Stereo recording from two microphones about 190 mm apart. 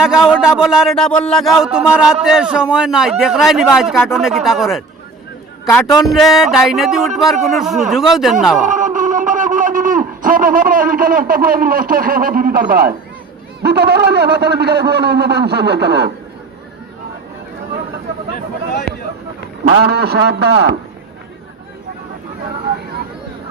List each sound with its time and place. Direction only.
0.0 s speech: 5° right (ahead or behind)
6.1 s speech: centre (ahead or behind)
8.6 s a man's voice: 40° right (ahead or behind); by 16.0 s 60° right (ahead or behind)
19.7 s a man's voice: 60° right (ahead or behind)